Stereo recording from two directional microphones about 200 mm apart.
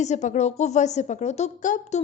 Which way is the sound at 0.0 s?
35° left (ahead or behind).